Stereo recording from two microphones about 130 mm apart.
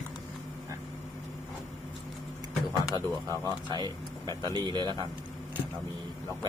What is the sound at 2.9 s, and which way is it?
Speech, 35° right (ahead or behind).